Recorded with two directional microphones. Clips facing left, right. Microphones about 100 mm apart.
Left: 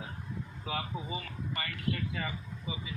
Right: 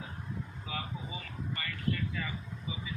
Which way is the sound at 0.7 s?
75° left (ahead or behind).